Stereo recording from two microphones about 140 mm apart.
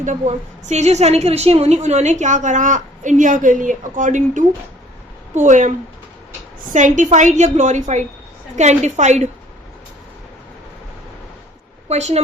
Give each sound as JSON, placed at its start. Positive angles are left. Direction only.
{"t": 0.0, "sound": "a woman's voice", "side_deg": -60}
{"t": 11.9, "sound": "a woman's voice", "side_deg": -50}